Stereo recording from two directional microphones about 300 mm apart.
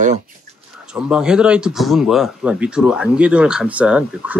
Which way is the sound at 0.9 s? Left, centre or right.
Centre.